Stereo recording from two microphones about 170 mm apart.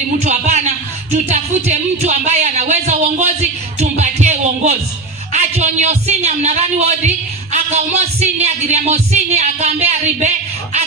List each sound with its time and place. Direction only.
0.2 s a man's voice: 40° right (ahead or behind)
3.8 s music: 45° right (ahead or behind)
5.3 s a man's voice: 45° right (ahead or behind)